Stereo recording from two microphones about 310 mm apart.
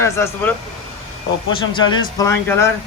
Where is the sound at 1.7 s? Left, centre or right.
Centre.